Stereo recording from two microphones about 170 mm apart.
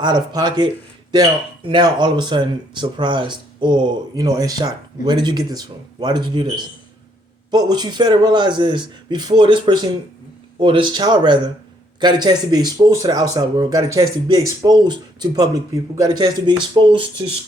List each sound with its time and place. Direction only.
0.0 s speech: 25° right (ahead or behind)